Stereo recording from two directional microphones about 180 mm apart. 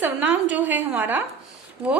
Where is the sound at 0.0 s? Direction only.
10° right (ahead or behind).